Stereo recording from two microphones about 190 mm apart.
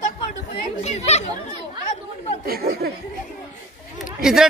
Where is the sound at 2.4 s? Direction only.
50° right (ahead or behind).